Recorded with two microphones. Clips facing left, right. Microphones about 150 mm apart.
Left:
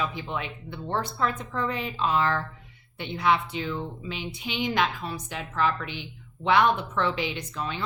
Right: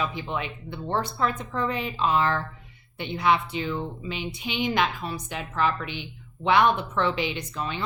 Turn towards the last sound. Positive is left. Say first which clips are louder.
# right 1 dB
turn(degrees=-20)  # may be behind; listen again after turning